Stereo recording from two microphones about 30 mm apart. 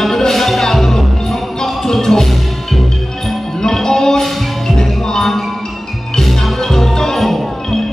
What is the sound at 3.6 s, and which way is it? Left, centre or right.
Music, centre.